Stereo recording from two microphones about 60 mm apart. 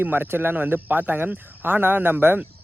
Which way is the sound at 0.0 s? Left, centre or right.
Right.